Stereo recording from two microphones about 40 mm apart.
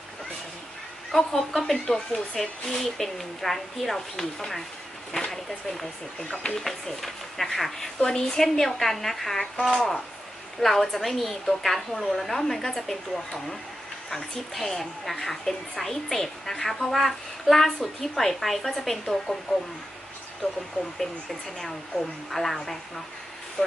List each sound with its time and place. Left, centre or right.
1.1 s a woman's voice: centre
1.8 s a woman's voice: centre
6.1 s speech: centre
6.7 s a woman's voice: centre
7.9 s a woman's voice: centre
20.4 s speech: left
21.0 s a woman's voice: centre
23.6 s speech: left